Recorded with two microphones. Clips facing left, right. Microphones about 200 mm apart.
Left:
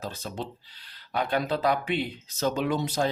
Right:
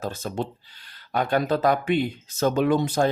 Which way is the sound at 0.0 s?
50° right (ahead or behind).